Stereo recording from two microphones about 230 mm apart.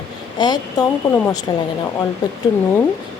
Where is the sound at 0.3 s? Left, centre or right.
Centre.